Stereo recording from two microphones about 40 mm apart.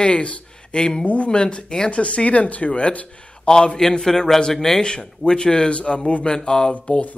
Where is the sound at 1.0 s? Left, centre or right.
Left.